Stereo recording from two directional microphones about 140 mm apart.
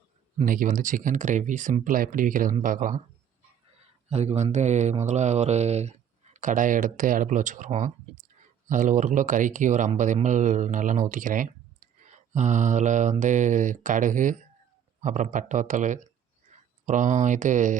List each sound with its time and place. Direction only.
0.4 s speech: 75° right (ahead or behind)
4.1 s speech: 50° right (ahead or behind)